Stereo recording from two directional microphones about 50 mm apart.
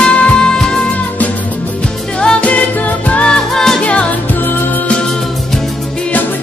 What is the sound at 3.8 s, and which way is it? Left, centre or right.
Music, left.